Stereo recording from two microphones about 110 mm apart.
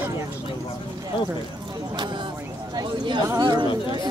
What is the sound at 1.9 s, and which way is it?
Speech, 45° right (ahead or behind).